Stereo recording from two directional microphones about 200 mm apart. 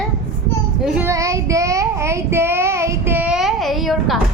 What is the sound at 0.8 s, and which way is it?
Child singing, 10° right (ahead or behind).